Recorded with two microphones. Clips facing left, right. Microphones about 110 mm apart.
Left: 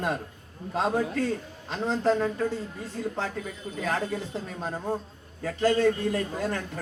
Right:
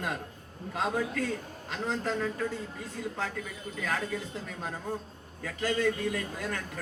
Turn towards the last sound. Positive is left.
turn(degrees=30)  # may be behind; listen again after turning